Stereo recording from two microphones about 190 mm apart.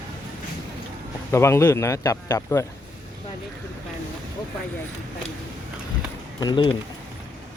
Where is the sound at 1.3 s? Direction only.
15° left (ahead or behind).